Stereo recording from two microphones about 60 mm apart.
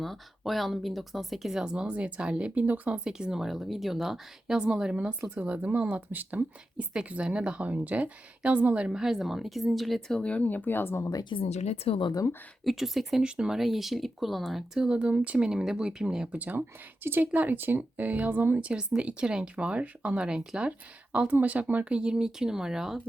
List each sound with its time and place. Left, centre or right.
0.0 s speech: centre; by 3.0 s right
3.0 s speech: centre
5.3 s speech: right; by 10.2 s centre
10.2 s speech: left
12.6 s speech: centre
13.2 s speech: centre
14.8 s speech: centre
16.4 s speech: right
18.5 s speech: centre